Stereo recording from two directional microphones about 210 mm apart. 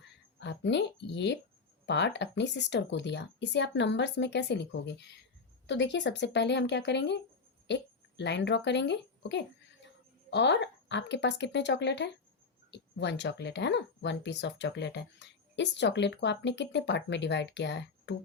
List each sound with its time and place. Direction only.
0.3 s speech: 55° left (ahead or behind)